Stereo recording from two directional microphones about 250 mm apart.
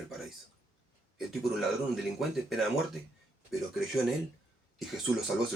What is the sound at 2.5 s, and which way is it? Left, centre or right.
Speech, centre.